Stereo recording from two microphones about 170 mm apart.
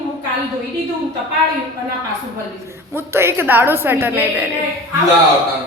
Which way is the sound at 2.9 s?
15° right (ahead or behind).